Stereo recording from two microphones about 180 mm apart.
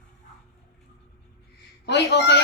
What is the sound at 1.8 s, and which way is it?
Speech, 70° left (ahead or behind).